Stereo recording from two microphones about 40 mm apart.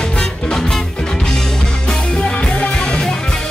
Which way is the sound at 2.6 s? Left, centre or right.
Left.